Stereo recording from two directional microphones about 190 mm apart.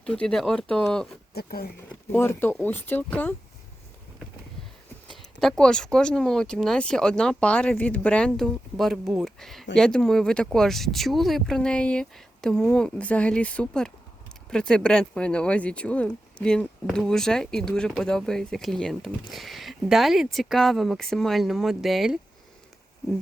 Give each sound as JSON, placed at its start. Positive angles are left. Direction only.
{"t": 0.0, "sound": "speech", "side_deg": 5}
{"t": 1.3, "sound": "speech", "side_deg": 55}
{"t": 2.1, "sound": "speech", "side_deg": 10}
{"t": 5.1, "sound": "speech", "side_deg": 0}